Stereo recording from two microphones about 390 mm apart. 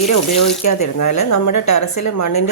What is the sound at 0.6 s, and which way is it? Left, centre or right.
Speech, left.